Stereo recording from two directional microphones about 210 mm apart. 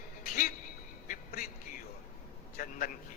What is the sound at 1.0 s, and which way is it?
Music, 40° left (ahead or behind).